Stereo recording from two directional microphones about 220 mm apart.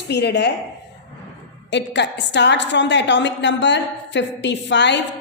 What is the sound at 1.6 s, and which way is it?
A woman's voice, 50° left (ahead or behind).